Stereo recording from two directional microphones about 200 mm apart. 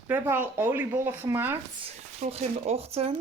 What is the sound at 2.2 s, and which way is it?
Speech, 30° right (ahead or behind).